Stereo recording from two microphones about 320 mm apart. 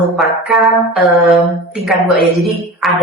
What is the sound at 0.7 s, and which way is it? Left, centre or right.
Speech, centre.